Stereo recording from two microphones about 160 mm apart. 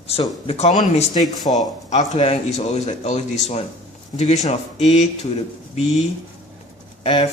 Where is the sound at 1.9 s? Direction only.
40° left (ahead or behind).